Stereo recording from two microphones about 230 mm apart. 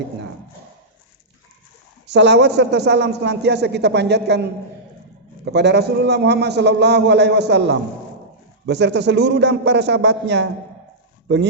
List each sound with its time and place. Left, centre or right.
2.0 s a man's voice: right
5.5 s a man's voice: right